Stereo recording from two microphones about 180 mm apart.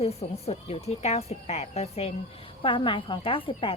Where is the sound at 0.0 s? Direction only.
35° left (ahead or behind).